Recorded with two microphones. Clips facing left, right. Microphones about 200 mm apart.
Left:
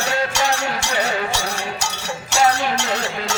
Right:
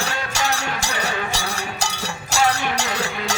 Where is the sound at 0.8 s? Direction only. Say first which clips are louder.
Left 4 dB; 35° right (ahead or behind).